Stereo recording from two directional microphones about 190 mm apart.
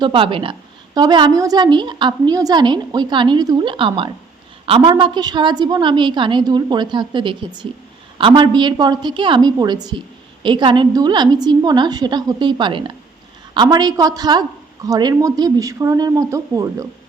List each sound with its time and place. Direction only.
0.0 s a woman's voice: 25° right (ahead or behind)